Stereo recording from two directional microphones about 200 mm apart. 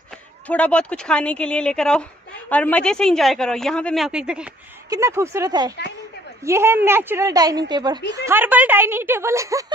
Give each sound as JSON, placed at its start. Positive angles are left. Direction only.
{"t": 0.5, "sound": "a woman's voice", "side_deg": 5}
{"t": 4.8, "sound": "a woman's voice", "side_deg": -15}
{"t": 8.3, "sound": "a woman's voice", "side_deg": -10}